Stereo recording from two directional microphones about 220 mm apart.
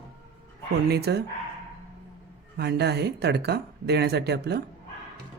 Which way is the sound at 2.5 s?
50° right (ahead or behind).